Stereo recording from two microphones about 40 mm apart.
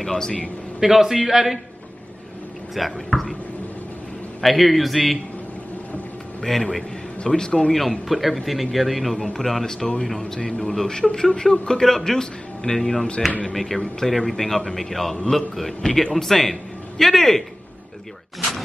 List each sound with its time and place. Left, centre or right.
0.0 s speech: centre
0.7 s a man's voice: centre
2.7 s a man's voice: centre
4.4 s a man's voice: centre
6.4 s speech: centre
7.7 s a man's voice: centre
9.1 s a man's voice: centre